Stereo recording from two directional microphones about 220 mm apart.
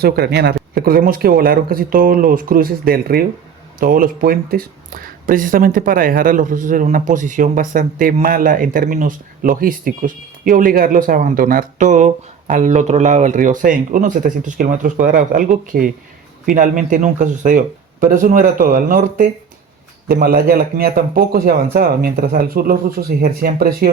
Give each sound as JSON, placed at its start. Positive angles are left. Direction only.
{"t": 0.0, "sound": "speech", "side_deg": -45}